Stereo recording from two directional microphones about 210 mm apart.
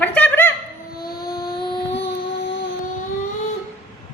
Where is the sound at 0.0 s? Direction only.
5° left (ahead or behind).